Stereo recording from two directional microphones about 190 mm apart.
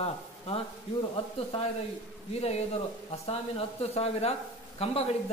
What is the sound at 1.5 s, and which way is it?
Speech, 30° left (ahead or behind).